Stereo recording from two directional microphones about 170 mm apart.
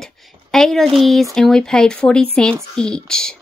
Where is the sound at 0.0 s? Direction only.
5° left (ahead or behind).